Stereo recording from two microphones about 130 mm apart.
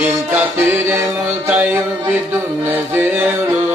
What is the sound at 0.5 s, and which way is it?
Music, 20° right (ahead or behind).